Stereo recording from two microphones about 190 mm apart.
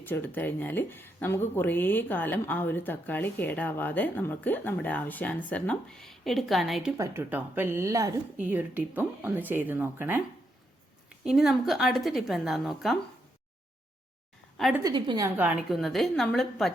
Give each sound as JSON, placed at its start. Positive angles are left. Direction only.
{"t": 0.0, "sound": "speech", "side_deg": 10}
{"t": 6.9, "sound": "a woman's voice", "side_deg": -15}
{"t": 14.8, "sound": "a woman's voice", "side_deg": -25}
{"t": 15.4, "sound": "a woman's voice", "side_deg": -5}